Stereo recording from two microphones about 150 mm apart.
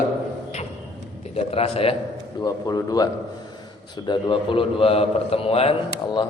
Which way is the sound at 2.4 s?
25° left (ahead or behind).